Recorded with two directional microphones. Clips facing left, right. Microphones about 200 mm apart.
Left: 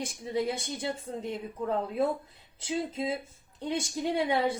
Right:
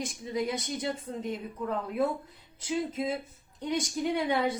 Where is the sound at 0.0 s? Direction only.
30° left (ahead or behind).